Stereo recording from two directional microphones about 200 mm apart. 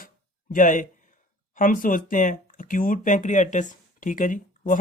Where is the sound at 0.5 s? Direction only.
40° left (ahead or behind).